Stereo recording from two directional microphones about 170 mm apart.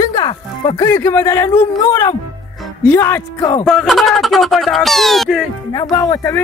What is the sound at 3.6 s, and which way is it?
Speech, centre (ahead or behind).